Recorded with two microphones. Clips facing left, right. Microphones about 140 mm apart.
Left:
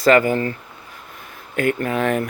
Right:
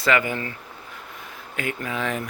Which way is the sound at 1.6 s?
55° left (ahead or behind).